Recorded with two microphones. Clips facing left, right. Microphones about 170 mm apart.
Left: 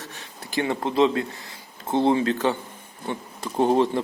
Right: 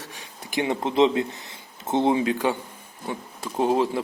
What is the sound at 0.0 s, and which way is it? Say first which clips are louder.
Speech: left 1 dB; 10° right (ahead or behind).